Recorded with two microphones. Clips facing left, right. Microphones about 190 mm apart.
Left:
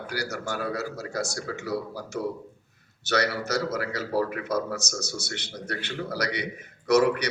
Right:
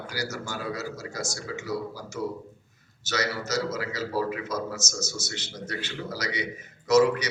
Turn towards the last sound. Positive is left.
turn(degrees=60)  # may be behind; listen again after turning